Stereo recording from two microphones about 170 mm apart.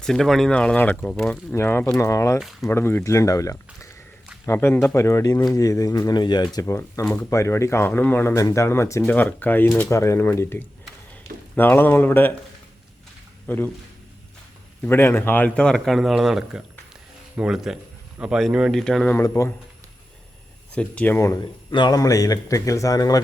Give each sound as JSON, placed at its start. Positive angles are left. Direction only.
{"t": 0.0, "sound": "speech", "side_deg": 0}
{"t": 2.4, "sound": "speech", "side_deg": 0}
{"t": 2.6, "sound": "speech", "side_deg": 15}
{"t": 13.5, "sound": "speech", "side_deg": 10}
{"t": 14.8, "sound": "speech", "side_deg": 15}
{"t": 19.2, "sound": "speech", "side_deg": 15}
{"t": 20.7, "sound": "speech", "side_deg": 10}
{"t": 21.7, "sound": "speech", "side_deg": 25}